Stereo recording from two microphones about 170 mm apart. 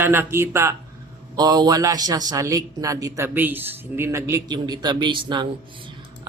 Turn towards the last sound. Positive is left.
turn(degrees=-25)  # may be behind; listen again after turning